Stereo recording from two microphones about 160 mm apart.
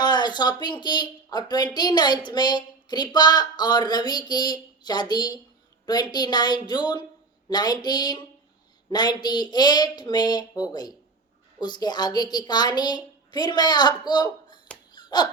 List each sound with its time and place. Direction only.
0.0 s speech: 25° left (ahead or behind)
14.9 s dog: 25° left (ahead or behind)